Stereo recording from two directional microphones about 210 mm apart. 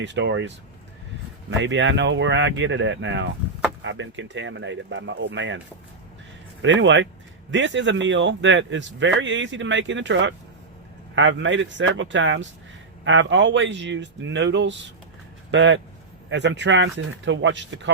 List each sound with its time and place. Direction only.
0.0 s a man's voice: 55° right (ahead or behind)
6.6 s a man's voice: 60° right (ahead or behind)